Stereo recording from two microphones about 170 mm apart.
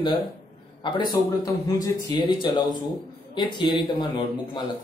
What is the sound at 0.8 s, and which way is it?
Speech, 25° left (ahead or behind).